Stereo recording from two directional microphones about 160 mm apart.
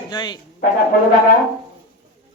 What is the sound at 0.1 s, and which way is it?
Speech, 25° left (ahead or behind).